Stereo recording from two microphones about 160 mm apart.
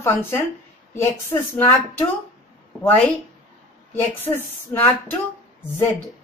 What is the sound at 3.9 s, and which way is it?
A woman's voice, 15° left (ahead or behind).